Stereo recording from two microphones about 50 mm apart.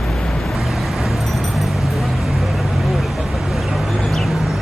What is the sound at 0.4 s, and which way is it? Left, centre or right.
Vehicle, centre.